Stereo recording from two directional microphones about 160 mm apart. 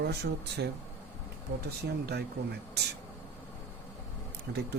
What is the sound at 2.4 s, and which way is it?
Speech, 75° right (ahead or behind).